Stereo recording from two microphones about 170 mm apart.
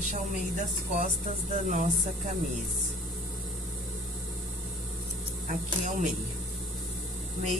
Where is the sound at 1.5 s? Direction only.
45° right (ahead or behind).